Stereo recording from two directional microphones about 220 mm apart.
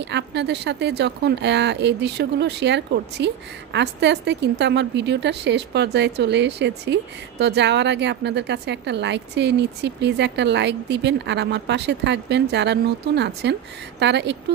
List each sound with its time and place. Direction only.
0.1 s speech: 50° right (ahead or behind)